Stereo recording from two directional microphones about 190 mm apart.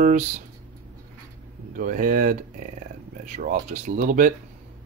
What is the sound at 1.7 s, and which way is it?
Speech, 45° right (ahead or behind).